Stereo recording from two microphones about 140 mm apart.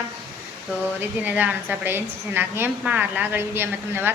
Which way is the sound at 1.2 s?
10° right (ahead or behind).